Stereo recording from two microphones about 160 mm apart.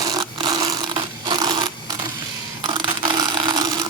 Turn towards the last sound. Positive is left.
turn(degrees=-25)  # may be behind; listen again after turning